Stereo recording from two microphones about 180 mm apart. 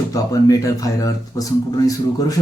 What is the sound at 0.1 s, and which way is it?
Speech, 20° left (ahead or behind).